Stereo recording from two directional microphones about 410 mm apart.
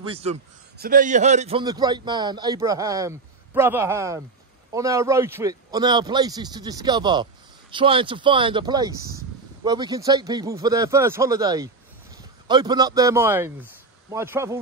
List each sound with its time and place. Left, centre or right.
0.1 s a man's voice: centre